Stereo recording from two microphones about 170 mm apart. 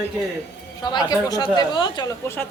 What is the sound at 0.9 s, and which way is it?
Speech, 20° left (ahead or behind).